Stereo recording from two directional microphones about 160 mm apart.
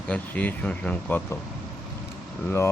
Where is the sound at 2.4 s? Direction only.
15° left (ahead or behind).